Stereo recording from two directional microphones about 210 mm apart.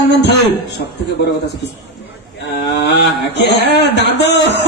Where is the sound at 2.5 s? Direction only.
50° left (ahead or behind).